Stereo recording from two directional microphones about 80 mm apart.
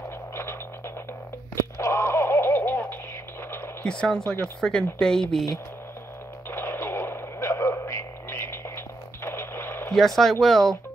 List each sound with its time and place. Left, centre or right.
0.4 s frog: left
1.5 s a sound: left
3.8 s speech: centre
6.5 s radio: left
9.8 s speech: centre